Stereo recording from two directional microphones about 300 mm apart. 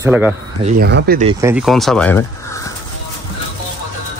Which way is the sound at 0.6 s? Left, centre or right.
Right.